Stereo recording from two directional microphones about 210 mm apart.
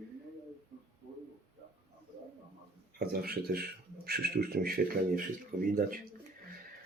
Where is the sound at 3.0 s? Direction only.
45° right (ahead or behind).